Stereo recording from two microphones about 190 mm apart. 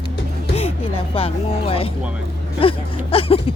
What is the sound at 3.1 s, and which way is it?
Speech, 30° left (ahead or behind).